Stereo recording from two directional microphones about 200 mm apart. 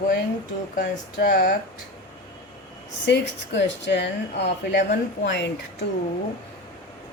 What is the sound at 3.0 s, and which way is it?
A woman's voice, 60° left (ahead or behind).